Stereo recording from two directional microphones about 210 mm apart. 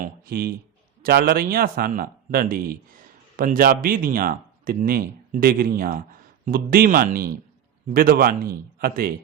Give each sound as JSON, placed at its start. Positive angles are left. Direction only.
{"t": 0.0, "sound": "speech", "side_deg": -45}